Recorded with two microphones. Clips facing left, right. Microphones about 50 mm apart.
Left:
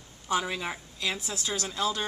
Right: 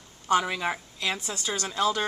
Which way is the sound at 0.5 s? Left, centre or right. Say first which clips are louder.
Right 5 dB; centre.